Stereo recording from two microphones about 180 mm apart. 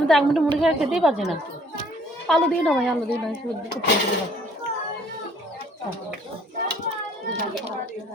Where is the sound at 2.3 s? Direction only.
5° left (ahead or behind).